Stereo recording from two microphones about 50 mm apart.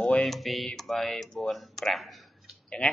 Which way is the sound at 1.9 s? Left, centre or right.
Centre.